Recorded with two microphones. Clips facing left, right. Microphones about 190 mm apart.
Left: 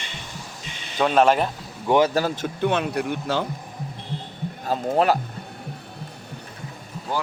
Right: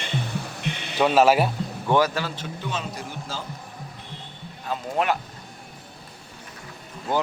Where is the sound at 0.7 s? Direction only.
65° right (ahead or behind).